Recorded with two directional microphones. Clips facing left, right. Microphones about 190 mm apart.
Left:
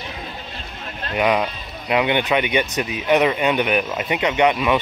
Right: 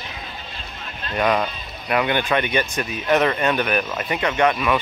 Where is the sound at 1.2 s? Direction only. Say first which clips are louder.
Left 1 dB; 10° left (ahead or behind).